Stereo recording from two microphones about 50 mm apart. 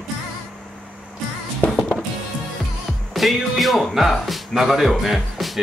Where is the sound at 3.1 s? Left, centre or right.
Centre.